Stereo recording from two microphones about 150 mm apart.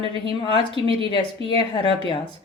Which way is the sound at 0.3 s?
35° left (ahead or behind).